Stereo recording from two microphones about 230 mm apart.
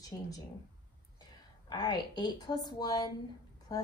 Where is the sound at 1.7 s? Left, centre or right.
Centre.